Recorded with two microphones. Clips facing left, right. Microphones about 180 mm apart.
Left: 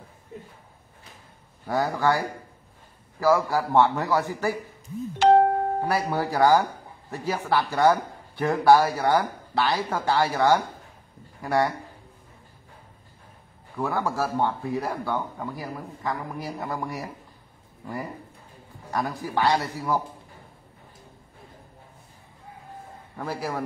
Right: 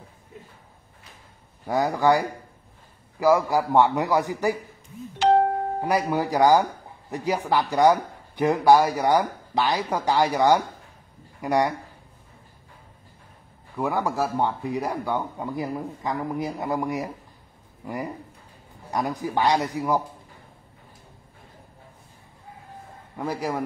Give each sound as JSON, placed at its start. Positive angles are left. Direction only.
{"t": 1.7, "sound": "speech", "side_deg": -20}
{"t": 5.2, "sound": "music", "side_deg": 50}
{"t": 5.9, "sound": "speech", "side_deg": -15}
{"t": 13.7, "sound": "speech", "side_deg": -15}
{"t": 23.1, "sound": "speech", "side_deg": -15}